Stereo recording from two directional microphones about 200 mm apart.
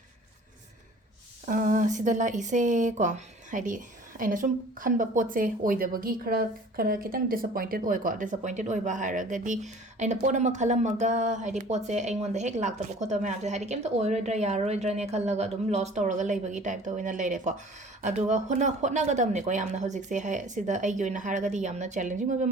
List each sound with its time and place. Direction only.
1.5 s a woman's voice: 40° right (ahead or behind)